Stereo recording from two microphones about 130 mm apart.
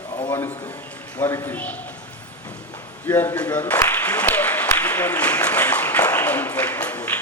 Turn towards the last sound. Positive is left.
turn(degrees=15)  # may be behind; listen again after turning